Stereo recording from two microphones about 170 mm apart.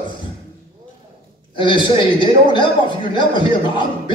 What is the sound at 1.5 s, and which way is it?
A man's voice, 30° left (ahead or behind).